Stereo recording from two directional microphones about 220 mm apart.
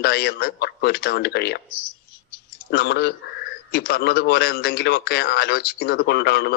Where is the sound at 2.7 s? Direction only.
45° left (ahead or behind).